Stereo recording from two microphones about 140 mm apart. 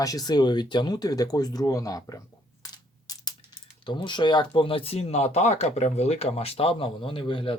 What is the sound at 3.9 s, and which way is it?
Speech, 35° left (ahead or behind).